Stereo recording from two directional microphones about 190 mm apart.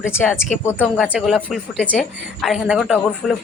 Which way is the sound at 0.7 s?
5° right (ahead or behind).